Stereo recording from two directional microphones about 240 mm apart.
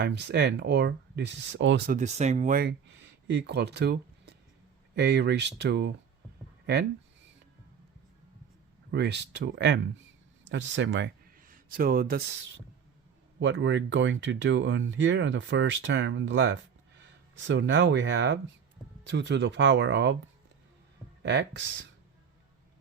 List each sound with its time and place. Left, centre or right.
0.0 s speech: right
1.9 s speech: right
8.9 s speech: right
11.3 s speech: right
13.4 s speech: right
21.2 s speech: right